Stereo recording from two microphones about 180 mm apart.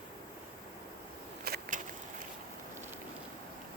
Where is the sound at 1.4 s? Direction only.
60° right (ahead or behind).